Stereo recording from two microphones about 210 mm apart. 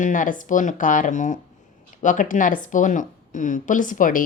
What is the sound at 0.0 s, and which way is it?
Speech, 35° left (ahead or behind).